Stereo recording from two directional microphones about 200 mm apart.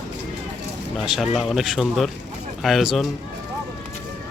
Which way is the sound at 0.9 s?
Centre (ahead or behind).